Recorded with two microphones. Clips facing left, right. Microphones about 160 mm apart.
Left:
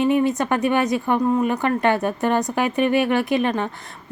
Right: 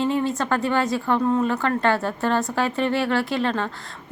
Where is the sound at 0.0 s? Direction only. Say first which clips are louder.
Left 4 dB; 15° left (ahead or behind).